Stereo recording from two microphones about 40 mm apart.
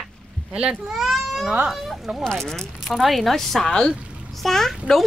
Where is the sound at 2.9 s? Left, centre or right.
Centre.